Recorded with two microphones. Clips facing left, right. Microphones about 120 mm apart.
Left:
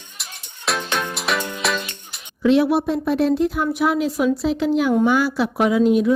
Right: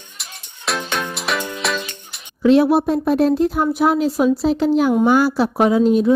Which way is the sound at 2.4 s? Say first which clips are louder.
Right 3 dB; 40° right (ahead or behind).